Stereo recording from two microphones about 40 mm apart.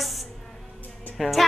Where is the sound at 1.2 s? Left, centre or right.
Centre.